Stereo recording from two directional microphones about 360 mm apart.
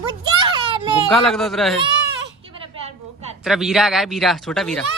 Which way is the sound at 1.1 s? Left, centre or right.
Centre.